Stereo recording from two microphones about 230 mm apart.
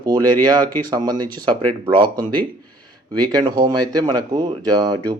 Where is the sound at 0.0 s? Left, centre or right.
Centre.